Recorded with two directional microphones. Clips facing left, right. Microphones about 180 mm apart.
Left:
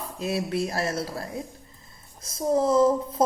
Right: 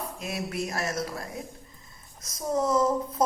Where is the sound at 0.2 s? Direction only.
30° left (ahead or behind).